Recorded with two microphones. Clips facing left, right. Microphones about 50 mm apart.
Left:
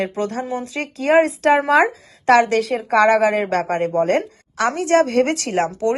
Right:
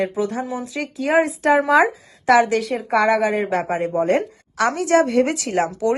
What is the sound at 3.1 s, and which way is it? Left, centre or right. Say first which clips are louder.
Speech: left 2 dB; left.